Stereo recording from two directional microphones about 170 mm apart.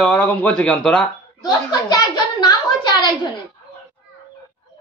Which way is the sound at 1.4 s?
25° left (ahead or behind).